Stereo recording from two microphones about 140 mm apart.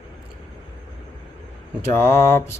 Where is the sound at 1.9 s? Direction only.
20° left (ahead or behind).